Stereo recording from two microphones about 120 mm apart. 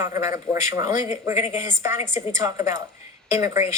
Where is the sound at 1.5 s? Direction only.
90° left.